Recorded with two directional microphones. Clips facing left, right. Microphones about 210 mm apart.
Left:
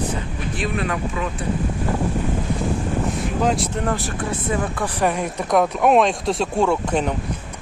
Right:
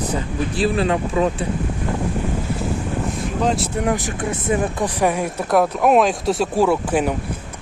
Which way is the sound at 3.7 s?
15° right (ahead or behind).